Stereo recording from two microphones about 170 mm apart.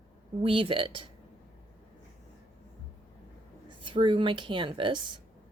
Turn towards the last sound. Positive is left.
turn(degrees=-30)  # may be behind; listen again after turning